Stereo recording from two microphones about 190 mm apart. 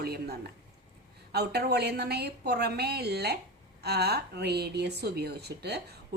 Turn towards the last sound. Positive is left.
turn(degrees=-60)  # may be behind; listen again after turning